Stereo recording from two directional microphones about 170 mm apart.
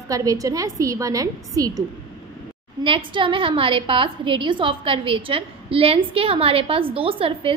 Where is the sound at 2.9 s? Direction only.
30° right (ahead or behind).